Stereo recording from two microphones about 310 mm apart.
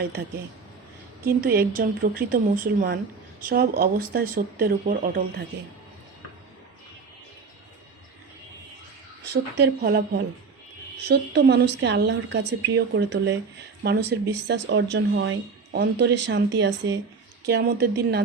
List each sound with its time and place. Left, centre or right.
1.2 s speech: right
9.6 s speech: right